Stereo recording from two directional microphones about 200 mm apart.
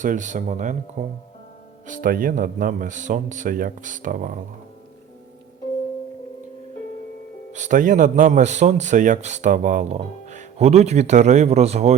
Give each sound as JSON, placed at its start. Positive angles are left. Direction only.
{"t": 0.0, "sound": "speech", "side_deg": -40}
{"t": 7.5, "sound": "speech", "side_deg": -40}